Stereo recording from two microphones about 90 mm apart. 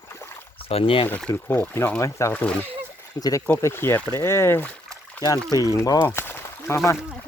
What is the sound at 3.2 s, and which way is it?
Speech, 45° left (ahead or behind).